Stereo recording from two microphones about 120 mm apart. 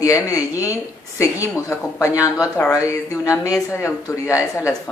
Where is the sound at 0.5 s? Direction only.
15° right (ahead or behind).